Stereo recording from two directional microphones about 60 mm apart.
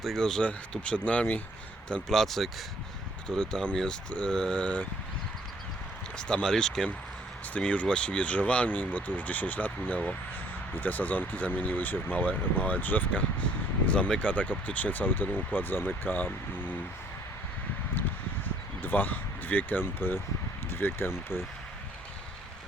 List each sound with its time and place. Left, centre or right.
0.0 s speech: centre
2.0 s speech: centre; by 4.9 s left
6.1 s speech: centre
7.5 s speech: left
13.8 s speech: centre
18.8 s speech: left